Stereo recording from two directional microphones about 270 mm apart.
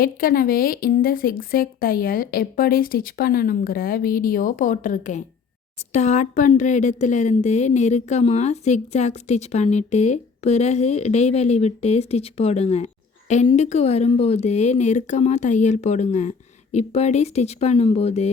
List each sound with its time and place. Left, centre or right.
0.0 s a woman's voice: left